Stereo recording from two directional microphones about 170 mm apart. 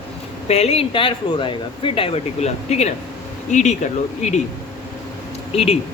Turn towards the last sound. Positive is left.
turn(degrees=35)  # may be behind; listen again after turning